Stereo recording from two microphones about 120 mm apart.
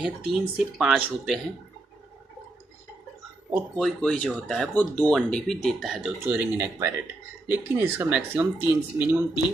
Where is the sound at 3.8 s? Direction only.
5° left (ahead or behind).